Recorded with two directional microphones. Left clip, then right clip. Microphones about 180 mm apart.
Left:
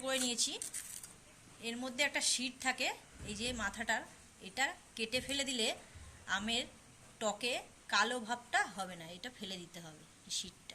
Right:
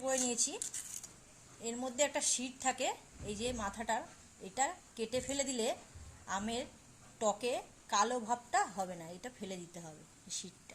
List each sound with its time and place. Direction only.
0.0 s speech: 45° right (ahead or behind)
1.6 s a woman's voice: 50° right (ahead or behind)